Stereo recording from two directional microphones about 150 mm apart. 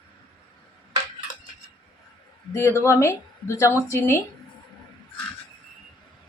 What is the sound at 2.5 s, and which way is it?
Speech, 20° left (ahead or behind).